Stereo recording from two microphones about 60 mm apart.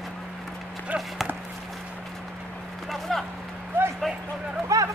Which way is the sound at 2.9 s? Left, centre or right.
Centre.